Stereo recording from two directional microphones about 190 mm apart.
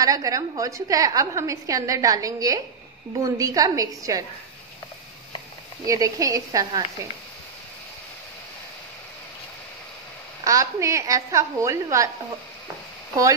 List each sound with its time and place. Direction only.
0.0 s a woman's voice: 15° right (ahead or behind)
5.9 s a woman's voice: 15° right (ahead or behind)
10.4 s a woman's voice: 15° right (ahead or behind)